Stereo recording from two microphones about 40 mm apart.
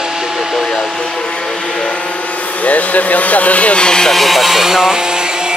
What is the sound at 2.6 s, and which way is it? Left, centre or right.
Speech, left.